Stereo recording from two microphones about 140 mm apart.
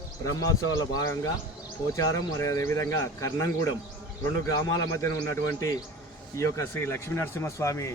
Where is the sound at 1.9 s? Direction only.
25° left (ahead or behind).